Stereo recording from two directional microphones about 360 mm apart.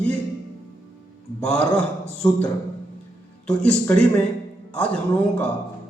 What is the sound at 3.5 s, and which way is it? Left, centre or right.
Speech, centre.